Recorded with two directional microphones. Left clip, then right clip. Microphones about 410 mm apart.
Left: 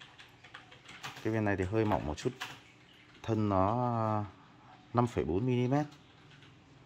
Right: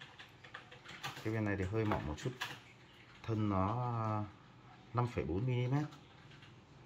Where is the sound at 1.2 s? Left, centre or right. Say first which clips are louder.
Left 7 dB; centre.